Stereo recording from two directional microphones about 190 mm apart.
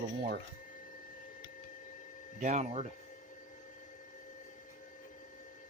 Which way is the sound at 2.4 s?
40° right (ahead or behind).